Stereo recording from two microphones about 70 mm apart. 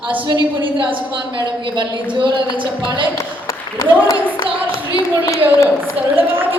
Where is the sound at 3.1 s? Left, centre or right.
Left.